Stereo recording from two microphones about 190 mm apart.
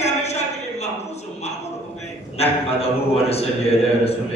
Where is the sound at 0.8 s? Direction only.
35° left (ahead or behind).